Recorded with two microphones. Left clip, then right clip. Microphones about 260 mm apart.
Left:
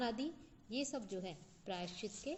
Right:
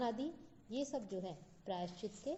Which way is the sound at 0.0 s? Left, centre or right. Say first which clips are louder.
Right 1 dB; left.